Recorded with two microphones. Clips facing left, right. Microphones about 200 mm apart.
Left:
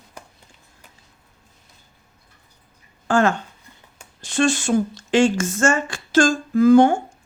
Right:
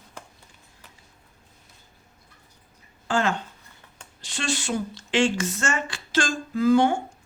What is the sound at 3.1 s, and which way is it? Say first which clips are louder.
Speech: left 6 dB; 50° left (ahead or behind).